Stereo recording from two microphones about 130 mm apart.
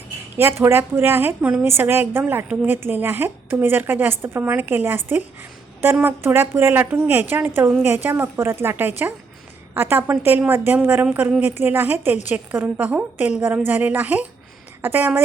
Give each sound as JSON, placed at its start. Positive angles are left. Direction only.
{"t": 0.3, "sound": "a woman's voice", "side_deg": -20}